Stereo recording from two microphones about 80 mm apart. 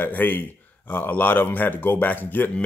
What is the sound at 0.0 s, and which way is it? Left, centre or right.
Speech, left.